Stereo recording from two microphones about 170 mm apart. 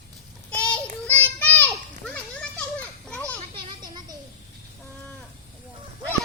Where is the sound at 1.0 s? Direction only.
10° left (ahead or behind).